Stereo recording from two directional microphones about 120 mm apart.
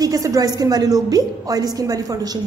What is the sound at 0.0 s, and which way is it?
A woman's voice, 30° right (ahead or behind).